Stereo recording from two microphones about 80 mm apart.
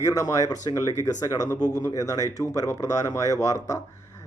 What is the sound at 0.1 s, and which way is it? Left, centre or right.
Speech, left.